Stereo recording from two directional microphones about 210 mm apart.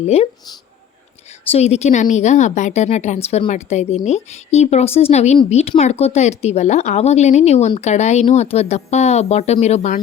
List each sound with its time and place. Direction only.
0.0 s speech: 30° left (ahead or behind)
1.5 s speech: 30° left (ahead or behind)